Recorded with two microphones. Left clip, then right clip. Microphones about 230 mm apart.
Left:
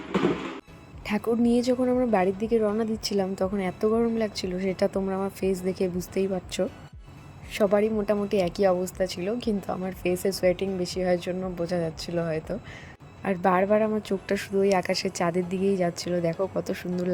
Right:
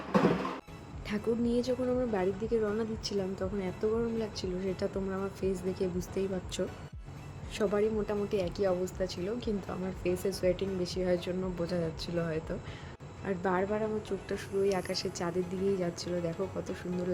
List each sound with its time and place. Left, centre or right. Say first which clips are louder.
1.0 s a woman's voice: left 7 dB; left